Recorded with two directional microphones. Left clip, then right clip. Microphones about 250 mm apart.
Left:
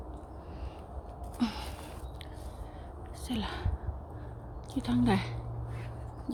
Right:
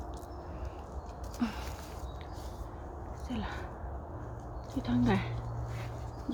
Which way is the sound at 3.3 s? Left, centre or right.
Left.